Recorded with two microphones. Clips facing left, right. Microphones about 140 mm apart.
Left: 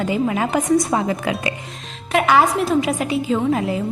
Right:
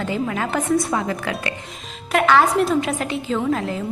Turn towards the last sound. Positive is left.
turn(degrees=10)  # may be behind; listen again after turning